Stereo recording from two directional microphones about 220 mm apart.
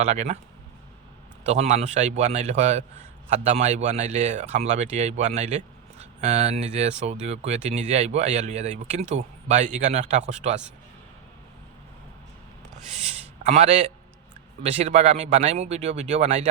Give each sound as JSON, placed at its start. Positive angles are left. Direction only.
{"t": 0.0, "sound": "speech", "side_deg": -30}
{"t": 1.5, "sound": "a man's voice", "side_deg": -30}
{"t": 13.4, "sound": "a man's voice", "side_deg": -30}